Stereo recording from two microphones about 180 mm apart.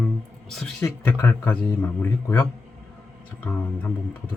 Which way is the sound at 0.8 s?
15° left (ahead or behind).